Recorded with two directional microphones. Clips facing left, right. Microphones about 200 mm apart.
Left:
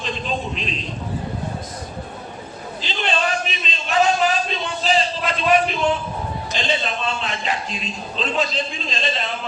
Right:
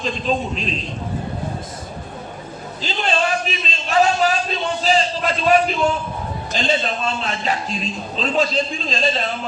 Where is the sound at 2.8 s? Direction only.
40° right (ahead or behind).